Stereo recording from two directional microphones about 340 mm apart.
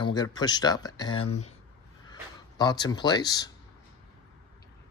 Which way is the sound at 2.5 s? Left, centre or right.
Centre.